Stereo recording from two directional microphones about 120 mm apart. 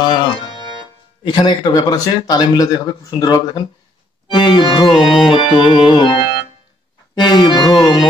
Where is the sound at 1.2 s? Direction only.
40° left (ahead or behind).